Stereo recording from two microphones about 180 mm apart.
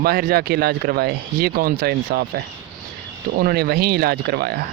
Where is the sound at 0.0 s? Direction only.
55° right (ahead or behind).